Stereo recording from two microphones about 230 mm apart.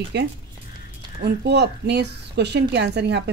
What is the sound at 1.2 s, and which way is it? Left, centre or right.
A woman's voice, right.